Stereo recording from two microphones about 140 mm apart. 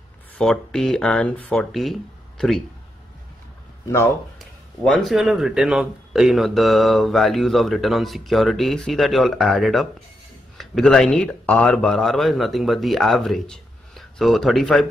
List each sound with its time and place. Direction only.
0.4 s speech: 5° left (ahead or behind)
3.8 s speech: 20° left (ahead or behind)
4.4 s speech: centre (ahead or behind)